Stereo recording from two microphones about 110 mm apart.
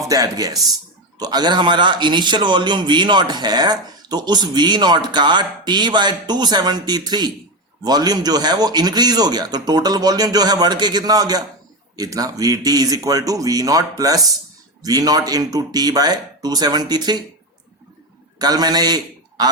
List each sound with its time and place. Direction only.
0.1 s a man's voice: 35° right (ahead or behind)
18.3 s a man's voice: 40° right (ahead or behind)